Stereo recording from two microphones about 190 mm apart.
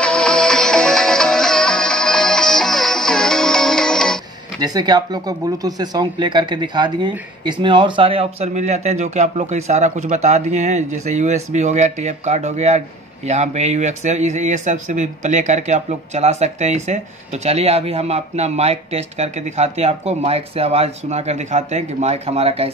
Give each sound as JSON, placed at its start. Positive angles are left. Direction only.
{"t": 0.0, "sound": "music", "side_deg": 5}
{"t": 4.6, "sound": "speech", "side_deg": -20}